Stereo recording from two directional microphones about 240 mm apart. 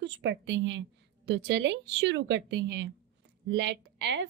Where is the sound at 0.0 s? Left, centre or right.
Right.